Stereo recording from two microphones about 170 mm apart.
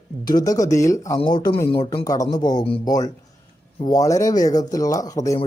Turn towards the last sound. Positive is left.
turn(degrees=20)  # may be behind; listen again after turning